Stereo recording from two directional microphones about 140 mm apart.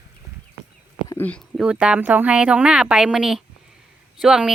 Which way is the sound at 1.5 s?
10° right (ahead or behind).